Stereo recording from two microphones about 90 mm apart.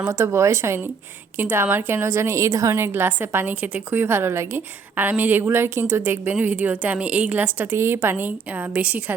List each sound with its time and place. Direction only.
0.1 s a woman's voice: 35° right (ahead or behind); by 4.0 s 15° right (ahead or behind)
4.0 s a woman's voice: 25° right (ahead or behind)